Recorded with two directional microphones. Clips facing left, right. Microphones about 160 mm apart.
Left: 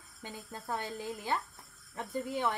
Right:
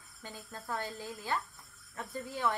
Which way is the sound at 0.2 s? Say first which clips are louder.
Left 2 dB; 20° left (ahead or behind).